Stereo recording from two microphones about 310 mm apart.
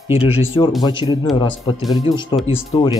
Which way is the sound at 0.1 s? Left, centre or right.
Centre.